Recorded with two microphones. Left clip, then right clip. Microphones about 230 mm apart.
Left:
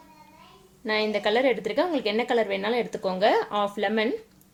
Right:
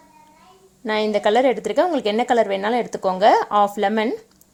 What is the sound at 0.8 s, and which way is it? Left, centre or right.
A woman's voice, right.